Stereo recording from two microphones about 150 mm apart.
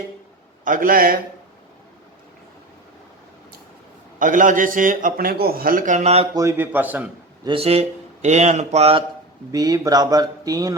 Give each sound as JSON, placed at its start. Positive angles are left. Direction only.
{"t": 0.6, "sound": "a man's voice", "side_deg": -65}
{"t": 4.2, "sound": "a man's voice", "side_deg": -60}
{"t": 6.3, "sound": "speech", "side_deg": -20}
{"t": 7.4, "sound": "speech", "side_deg": -40}
{"t": 9.5, "sound": "speech", "side_deg": -25}